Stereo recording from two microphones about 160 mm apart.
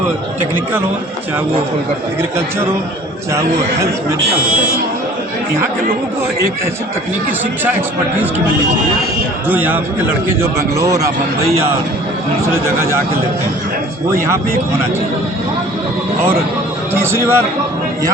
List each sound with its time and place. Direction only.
9.5 s a man's voice: 10° right (ahead or behind)
12.6 s a man's voice: 15° right (ahead or behind)
16.9 s a man's voice: 15° right (ahead or behind)